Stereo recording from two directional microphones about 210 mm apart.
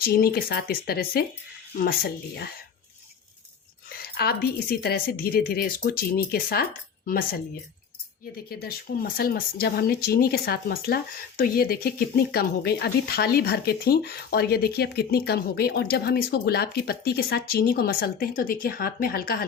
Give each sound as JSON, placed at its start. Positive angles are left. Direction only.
{"t": 0.0, "sound": "speech", "side_deg": 45}
{"t": 3.8, "sound": "speech", "side_deg": 45}
{"t": 8.4, "sound": "speech", "side_deg": 45}